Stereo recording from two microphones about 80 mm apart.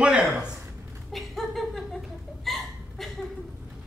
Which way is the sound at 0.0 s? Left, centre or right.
Centre.